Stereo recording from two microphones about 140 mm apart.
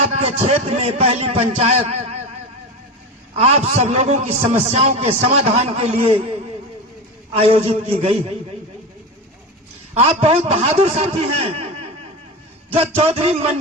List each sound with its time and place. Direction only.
0.0 s a man's voice: 45° right (ahead or behind)
3.3 s a man's voice: 50° right (ahead or behind)
7.3 s a man's voice: 45° right (ahead or behind)
9.9 s a man's voice: 45° right (ahead or behind)
12.7 s a man's voice: 45° right (ahead or behind)